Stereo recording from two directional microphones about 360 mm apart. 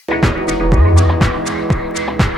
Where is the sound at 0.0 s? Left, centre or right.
Centre.